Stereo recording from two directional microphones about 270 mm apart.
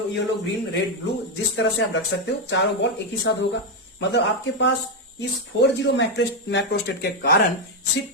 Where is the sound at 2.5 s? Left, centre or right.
Left.